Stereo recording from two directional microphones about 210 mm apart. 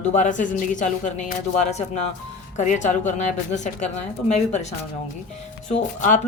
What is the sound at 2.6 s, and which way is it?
Speech, 35° left (ahead or behind).